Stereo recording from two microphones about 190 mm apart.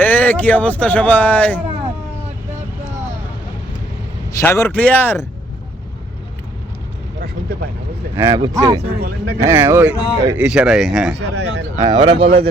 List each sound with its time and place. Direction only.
0.0 s speech: 10° left (ahead or behind)
4.4 s speech: 15° left (ahead or behind)
8.1 s speech: 15° right (ahead or behind)
9.0 s speech: 60° right (ahead or behind)
9.4 s speech: 10° right (ahead or behind)
11.2 s speech: 65° right (ahead or behind)
11.8 s speech: 20° right (ahead or behind)